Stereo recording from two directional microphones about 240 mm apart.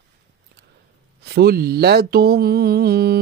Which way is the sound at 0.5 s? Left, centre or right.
Right.